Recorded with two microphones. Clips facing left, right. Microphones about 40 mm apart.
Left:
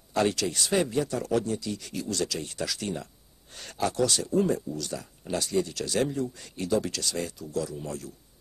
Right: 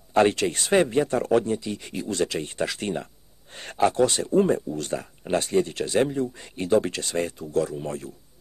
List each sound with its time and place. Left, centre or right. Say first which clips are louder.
0.1 s speech: right 6 dB; right